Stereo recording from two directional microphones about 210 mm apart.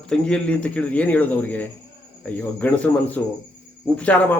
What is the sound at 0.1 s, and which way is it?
A man's voice, 5° left (ahead or behind).